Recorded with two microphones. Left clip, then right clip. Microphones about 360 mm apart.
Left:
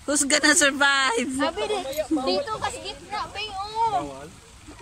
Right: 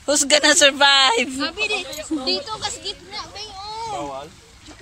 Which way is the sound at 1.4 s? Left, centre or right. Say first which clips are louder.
Right 2 dB; left.